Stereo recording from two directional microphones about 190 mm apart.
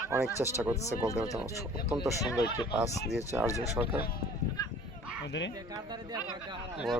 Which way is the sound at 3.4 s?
15° left (ahead or behind).